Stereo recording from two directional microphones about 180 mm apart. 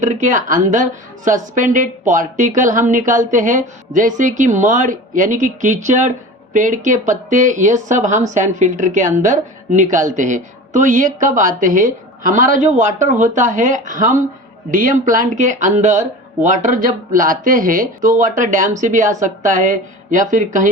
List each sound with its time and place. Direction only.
0.0 s speech: 45° right (ahead or behind)